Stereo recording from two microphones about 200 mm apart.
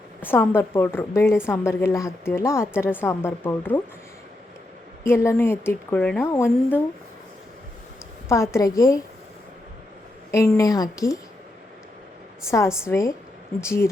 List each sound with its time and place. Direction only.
0.2 s a woman's voice: 10° left (ahead or behind)
5.0 s a woman's voice: 15° left (ahead or behind)
8.3 s a woman's voice: 15° left (ahead or behind)
10.3 s a woman's voice: 15° left (ahead or behind)
12.5 s a woman's voice: 15° left (ahead or behind)